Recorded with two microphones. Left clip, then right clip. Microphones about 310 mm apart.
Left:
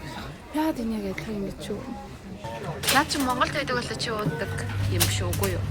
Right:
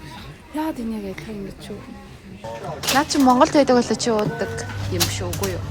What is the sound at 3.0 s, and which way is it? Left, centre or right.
A woman's voice, centre.